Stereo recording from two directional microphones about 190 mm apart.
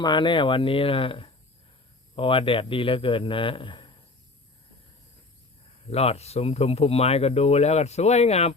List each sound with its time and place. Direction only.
0.0 s a man's voice: 25° left (ahead or behind)
5.9 s speech: 35° left (ahead or behind)